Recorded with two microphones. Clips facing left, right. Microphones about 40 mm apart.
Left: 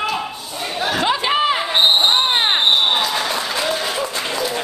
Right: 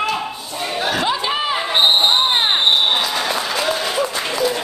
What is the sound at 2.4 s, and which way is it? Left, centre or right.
Applause, centre.